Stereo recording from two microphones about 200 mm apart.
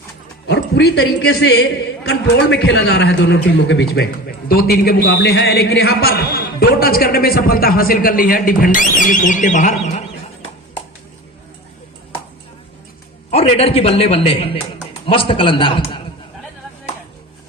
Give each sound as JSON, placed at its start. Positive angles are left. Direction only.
{"t": 0.4, "sound": "a man's voice", "side_deg": 60}
{"t": 13.3, "sound": "a man's voice", "side_deg": 30}